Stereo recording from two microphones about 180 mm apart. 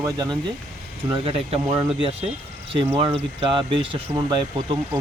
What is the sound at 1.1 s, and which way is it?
Speech, 30° right (ahead or behind).